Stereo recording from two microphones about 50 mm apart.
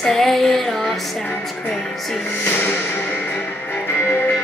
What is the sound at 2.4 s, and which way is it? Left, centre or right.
Music, left.